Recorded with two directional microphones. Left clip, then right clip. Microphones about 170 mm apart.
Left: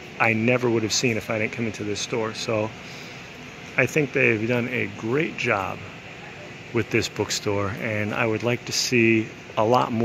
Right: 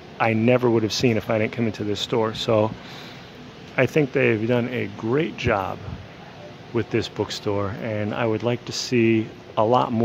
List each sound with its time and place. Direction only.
0.2 s speech: 15° right (ahead or behind)
3.7 s speech: 15° right (ahead or behind)
6.7 s speech: 10° right (ahead or behind)